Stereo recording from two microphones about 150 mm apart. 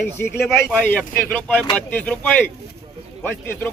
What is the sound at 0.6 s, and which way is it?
Speech, 10° left (ahead or behind).